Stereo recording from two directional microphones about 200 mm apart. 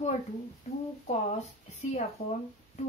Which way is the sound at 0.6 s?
35° left (ahead or behind).